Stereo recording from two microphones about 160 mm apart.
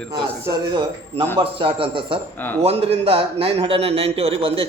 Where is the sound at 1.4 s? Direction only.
35° right (ahead or behind).